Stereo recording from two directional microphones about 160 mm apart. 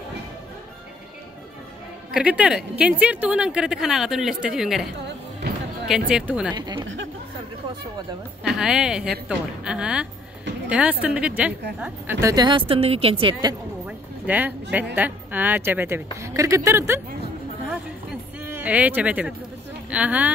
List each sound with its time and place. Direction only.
2.1 s a woman's voice: 5° right (ahead or behind)
5.9 s a woman's voice: 5° right (ahead or behind)
6.5 s speech: 25° right (ahead or behind)
8.5 s a woman's voice: 5° right (ahead or behind); by 13.6 s 30° right (ahead or behind)
13.8 s a sound: 10° right (ahead or behind)
15.0 s a woman's voice: 10° right (ahead or behind)
18.5 s a woman's voice: 10° right (ahead or behind)